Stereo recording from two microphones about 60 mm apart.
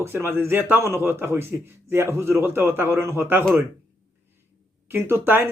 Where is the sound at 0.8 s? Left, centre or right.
Right.